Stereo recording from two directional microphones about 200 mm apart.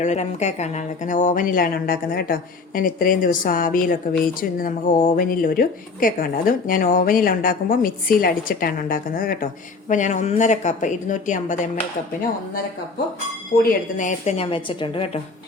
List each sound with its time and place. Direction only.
0.0 s a woman's voice: 35° left (ahead or behind)
13.7 s a woman's voice: 40° left (ahead or behind)